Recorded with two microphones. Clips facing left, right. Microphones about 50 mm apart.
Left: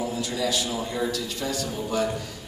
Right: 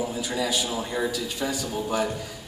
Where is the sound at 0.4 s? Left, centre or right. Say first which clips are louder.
Even; centre.